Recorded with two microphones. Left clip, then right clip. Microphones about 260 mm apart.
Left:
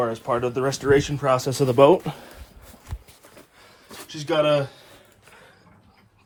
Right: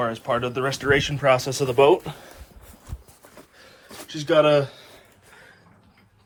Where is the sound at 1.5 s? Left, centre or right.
Left.